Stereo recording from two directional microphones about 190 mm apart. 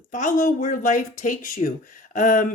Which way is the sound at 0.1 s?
40° left (ahead or behind).